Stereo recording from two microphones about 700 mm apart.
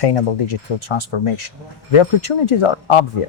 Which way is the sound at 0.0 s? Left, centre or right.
Left.